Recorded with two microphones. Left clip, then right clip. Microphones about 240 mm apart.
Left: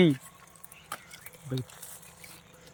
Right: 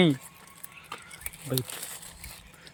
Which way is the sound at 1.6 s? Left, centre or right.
Right.